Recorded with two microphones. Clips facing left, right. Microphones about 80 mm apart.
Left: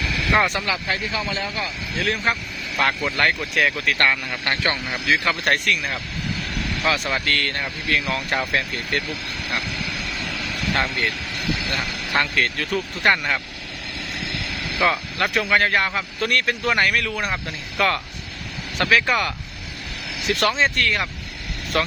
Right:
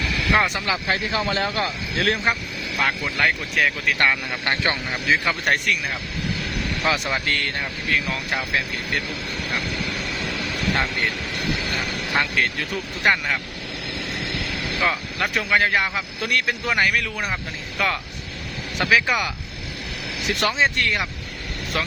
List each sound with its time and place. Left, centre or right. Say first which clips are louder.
0.3 s speech: left 2 dB; centre
0.6 s speech: right 1 dB; right
1.2 s speech: right 4 dB; right
2.7 s speech: left 2 dB; centre
4.4 s speech: even; right
8.0 s speech: left 2 dB; centre
10.2 s vehicle: right 2 dB; centre
12.1 s speech: left 1 dB; centre
14.3 s vehicle: right 1 dB; centre
14.8 s speech: left 4 dB; centre
21.7 s speech: left 4 dB; centre